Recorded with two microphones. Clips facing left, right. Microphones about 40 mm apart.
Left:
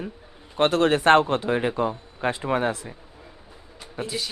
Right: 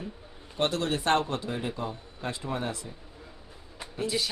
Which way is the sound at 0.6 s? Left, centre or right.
Left.